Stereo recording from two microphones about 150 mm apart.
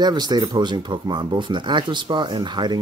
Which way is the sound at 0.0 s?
30° right (ahead or behind).